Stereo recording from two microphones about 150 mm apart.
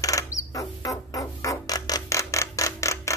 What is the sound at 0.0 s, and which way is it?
Music, 20° left (ahead or behind).